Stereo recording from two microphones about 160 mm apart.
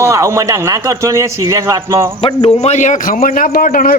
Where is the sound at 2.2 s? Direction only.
35° left (ahead or behind); by 3.9 s 60° left (ahead or behind).